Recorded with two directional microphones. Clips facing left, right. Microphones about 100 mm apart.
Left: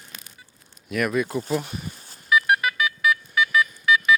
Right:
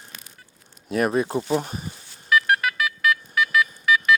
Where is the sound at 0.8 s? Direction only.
35° right (ahead or behind).